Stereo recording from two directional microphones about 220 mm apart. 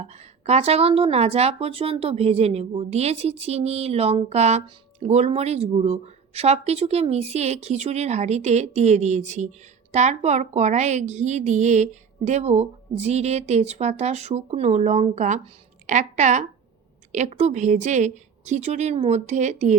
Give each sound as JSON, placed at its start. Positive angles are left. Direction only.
{"t": 0.0, "sound": "a woman's voice", "side_deg": -30}